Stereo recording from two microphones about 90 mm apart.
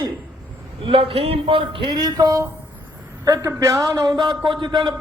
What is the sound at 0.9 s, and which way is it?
A man's voice, 80° right.